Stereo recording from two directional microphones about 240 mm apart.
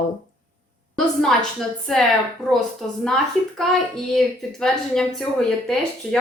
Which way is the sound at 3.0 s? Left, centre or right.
Centre.